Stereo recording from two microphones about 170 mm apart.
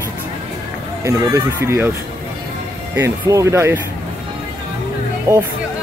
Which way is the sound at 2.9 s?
20° right (ahead or behind).